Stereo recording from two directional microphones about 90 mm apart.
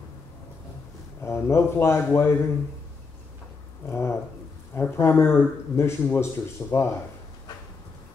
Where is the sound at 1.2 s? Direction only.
30° left (ahead or behind).